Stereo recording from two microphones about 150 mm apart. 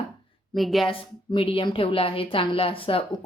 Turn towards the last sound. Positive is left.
turn(degrees=40)  # may be behind; listen again after turning